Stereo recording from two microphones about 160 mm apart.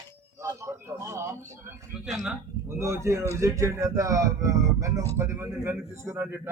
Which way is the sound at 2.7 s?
15° right (ahead or behind).